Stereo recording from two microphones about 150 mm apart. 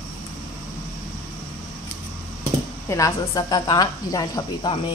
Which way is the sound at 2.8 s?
20° left (ahead or behind).